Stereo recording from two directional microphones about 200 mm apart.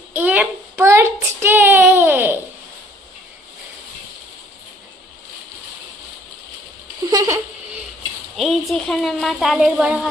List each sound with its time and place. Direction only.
0.1 s child singing: 5° right (ahead or behind)
7.1 s a sound: 15° right (ahead or behind)
8.4 s a woman's voice: centre (ahead or behind)